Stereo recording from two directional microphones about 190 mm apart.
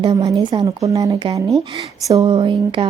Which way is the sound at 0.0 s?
20° right (ahead or behind).